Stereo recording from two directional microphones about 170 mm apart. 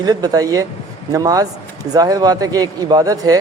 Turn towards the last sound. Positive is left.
turn(degrees=-20)  # may be behind; listen again after turning